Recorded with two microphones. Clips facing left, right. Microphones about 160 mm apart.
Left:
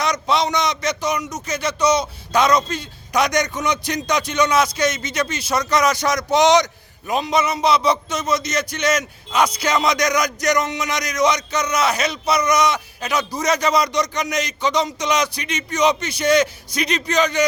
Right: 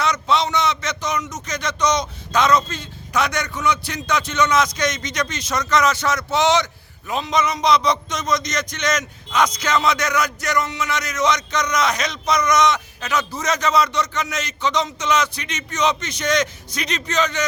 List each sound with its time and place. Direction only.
0.0 s a man's voice: 15° left (ahead or behind)